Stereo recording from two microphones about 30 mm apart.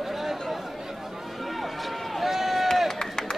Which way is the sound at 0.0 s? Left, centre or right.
Centre.